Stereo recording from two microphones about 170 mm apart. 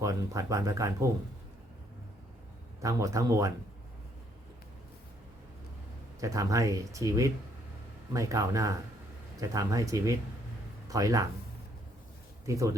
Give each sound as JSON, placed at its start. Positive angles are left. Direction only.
{"t": 0.0, "sound": "speech", "side_deg": -20}
{"t": 2.8, "sound": "speech", "side_deg": -20}
{"t": 6.1, "sound": "speech", "side_deg": -20}
{"t": 12.5, "sound": "speech", "side_deg": -20}